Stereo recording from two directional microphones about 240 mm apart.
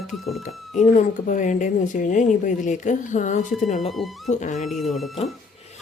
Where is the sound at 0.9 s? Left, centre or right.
Left.